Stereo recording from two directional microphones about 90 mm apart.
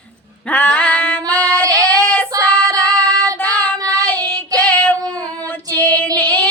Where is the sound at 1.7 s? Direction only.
10° left (ahead or behind).